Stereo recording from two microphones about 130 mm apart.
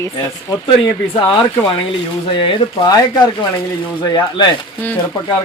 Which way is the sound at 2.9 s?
30° left (ahead or behind).